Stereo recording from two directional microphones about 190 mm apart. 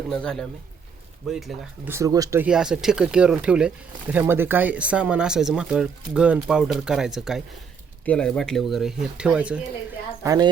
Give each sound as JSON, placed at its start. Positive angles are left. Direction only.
{"t": 0.1, "sound": "speech", "side_deg": 5}
{"t": 1.9, "sound": "speech", "side_deg": -15}
{"t": 2.5, "sound": "speech", "side_deg": -5}
{"t": 10.2, "sound": "speech", "side_deg": -20}